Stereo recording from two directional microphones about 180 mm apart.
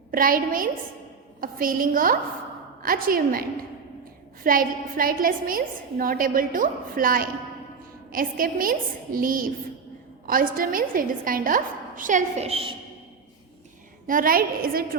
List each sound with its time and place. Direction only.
0.1 s a woman's voice: 50° right (ahead or behind); by 12.7 s 30° right (ahead or behind)
14.1 s a woman's voice: 50° right (ahead or behind)